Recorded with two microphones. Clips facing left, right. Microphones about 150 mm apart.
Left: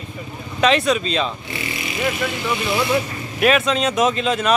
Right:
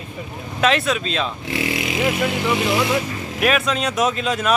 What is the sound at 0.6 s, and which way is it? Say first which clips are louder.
Speech: left 2 dB; centre (ahead or behind).